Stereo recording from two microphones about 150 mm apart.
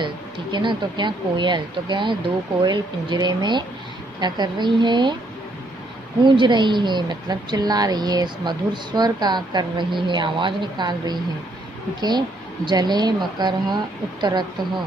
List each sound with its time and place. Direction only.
0.0 s a woman's voice: 30° right (ahead or behind)
6.2 s a woman's voice: 30° right (ahead or behind)
12.6 s a woman's voice: 30° right (ahead or behind)